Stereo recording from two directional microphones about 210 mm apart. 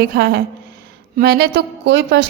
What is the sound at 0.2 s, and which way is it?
A woman's voice, 50° right (ahead or behind).